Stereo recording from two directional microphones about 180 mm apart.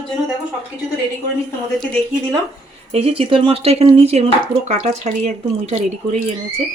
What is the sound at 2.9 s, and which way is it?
Speech, 35° right (ahead or behind).